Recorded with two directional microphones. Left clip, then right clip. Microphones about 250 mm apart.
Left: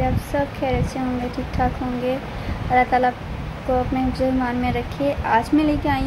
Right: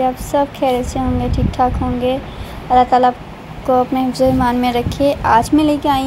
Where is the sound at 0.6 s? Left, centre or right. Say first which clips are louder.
Right 7 dB; centre.